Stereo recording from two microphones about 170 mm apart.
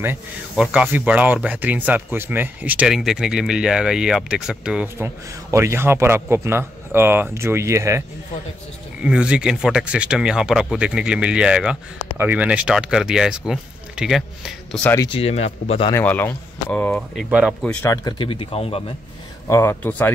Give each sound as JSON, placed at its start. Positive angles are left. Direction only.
{"t": 0.0, "sound": "speech", "side_deg": -10}
{"t": 9.0, "sound": "speech", "side_deg": -5}
{"t": 15.0, "sound": "speech", "side_deg": 30}
{"t": 15.9, "sound": "speech", "side_deg": 10}
{"t": 17.8, "sound": "speech", "side_deg": 25}
{"t": 19.4, "sound": "speech", "side_deg": 15}